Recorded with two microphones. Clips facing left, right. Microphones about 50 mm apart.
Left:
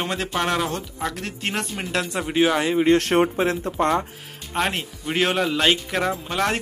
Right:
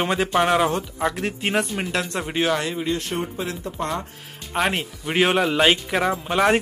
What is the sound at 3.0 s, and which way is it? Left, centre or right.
Speech, left.